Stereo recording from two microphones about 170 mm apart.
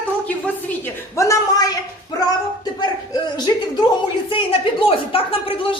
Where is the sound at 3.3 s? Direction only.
25° left (ahead or behind).